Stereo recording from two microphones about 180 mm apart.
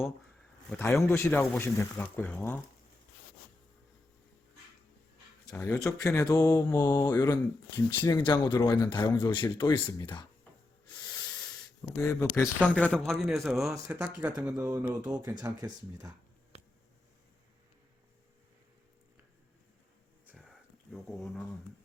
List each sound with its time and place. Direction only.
0.7 s speech: 10° left (ahead or behind)
5.5 s speech: 10° left (ahead or behind); by 10.2 s 25° left (ahead or behind)
11.9 s speech: 15° left (ahead or behind)
12.5 s speech: centre (ahead or behind); by 16.1 s 20° right (ahead or behind)
20.9 s speech: centre (ahead or behind)